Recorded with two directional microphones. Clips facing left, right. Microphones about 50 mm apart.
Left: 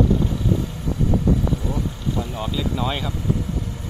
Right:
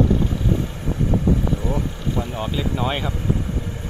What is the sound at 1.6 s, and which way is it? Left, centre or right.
Vehicle, right.